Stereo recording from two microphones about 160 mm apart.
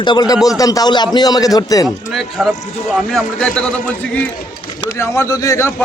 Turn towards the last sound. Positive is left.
turn(degrees=15)  # may be behind; listen again after turning